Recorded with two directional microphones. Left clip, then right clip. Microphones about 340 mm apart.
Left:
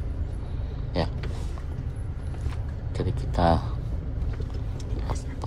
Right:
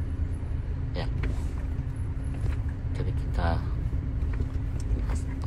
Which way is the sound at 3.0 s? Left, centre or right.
Centre.